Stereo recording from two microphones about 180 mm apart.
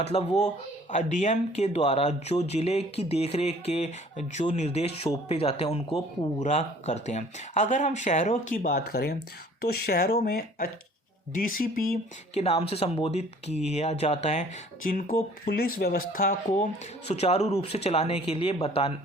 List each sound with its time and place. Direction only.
0.0 s speech: 35° left (ahead or behind); by 11.8 s 50° left (ahead or behind)
12.3 s speech: 35° left (ahead or behind)
14.8 s speech: 50° left (ahead or behind)
17.1 s speech: 35° left (ahead or behind)